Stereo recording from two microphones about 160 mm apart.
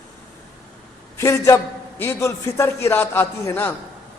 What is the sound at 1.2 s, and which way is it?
A man's voice, 20° left (ahead or behind).